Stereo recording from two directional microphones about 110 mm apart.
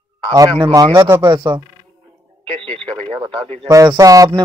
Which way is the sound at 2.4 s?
55° right (ahead or behind).